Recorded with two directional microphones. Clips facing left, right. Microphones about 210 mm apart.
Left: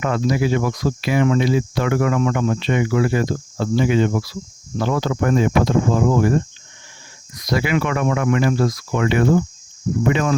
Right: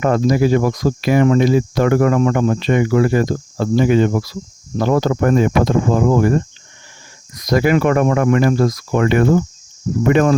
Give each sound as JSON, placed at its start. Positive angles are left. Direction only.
{"t": 0.0, "sound": "speech", "side_deg": -45}